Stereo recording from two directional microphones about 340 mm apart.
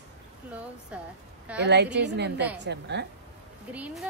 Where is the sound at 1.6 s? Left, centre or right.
Right.